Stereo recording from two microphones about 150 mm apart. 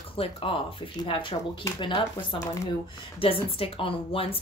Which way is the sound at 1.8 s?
30° left (ahead or behind).